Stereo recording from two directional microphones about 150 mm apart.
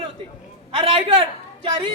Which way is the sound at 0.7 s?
40° right (ahead or behind).